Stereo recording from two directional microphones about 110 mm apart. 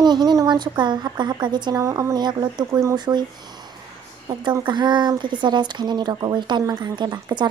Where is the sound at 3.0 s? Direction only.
40° right (ahead or behind).